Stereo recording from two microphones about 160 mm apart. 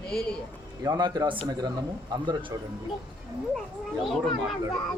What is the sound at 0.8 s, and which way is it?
Speech, 25° right (ahead or behind).